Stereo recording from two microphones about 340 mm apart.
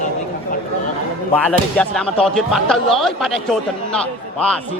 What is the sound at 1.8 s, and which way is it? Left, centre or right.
A man's voice, centre.